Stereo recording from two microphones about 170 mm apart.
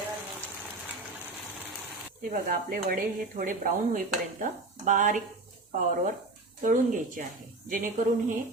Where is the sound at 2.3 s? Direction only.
55° right (ahead or behind).